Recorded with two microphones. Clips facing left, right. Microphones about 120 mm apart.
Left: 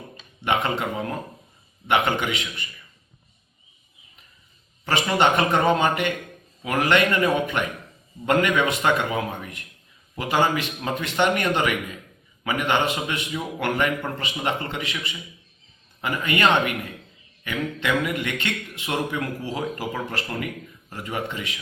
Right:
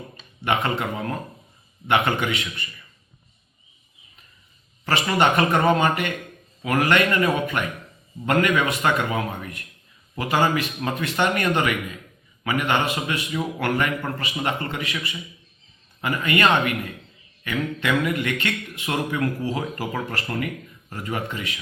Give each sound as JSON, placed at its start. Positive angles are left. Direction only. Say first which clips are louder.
{"t": 0.4, "sound": "speech", "louder": "even", "side_deg": 15}
{"t": 4.9, "sound": "a man's voice", "louder": "even", "side_deg": 20}
{"t": 17.7, "sound": "a man's voice", "louder": "right 1 dB", "side_deg": 20}